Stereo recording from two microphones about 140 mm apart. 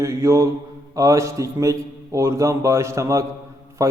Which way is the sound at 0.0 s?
20° right (ahead or behind).